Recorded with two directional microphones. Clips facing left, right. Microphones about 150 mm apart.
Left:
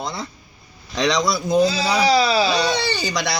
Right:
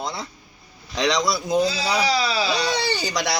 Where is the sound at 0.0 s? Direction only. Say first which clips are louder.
Left 1 dB; 5° right (ahead or behind).